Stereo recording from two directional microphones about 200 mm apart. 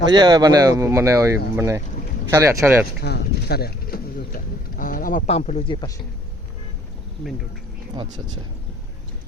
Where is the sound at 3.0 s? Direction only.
55° left (ahead or behind); by 5.9 s 25° left (ahead or behind).